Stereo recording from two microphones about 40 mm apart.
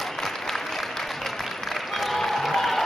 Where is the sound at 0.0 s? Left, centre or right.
Centre.